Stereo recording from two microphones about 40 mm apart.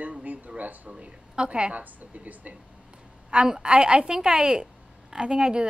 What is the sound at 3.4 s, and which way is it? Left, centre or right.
A woman's voice, centre.